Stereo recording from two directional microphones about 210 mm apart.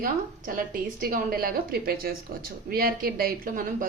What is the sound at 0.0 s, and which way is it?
A woman's voice, 40° right (ahead or behind).